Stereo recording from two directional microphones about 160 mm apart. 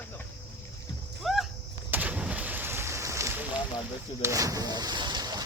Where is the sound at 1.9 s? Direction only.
10° right (ahead or behind).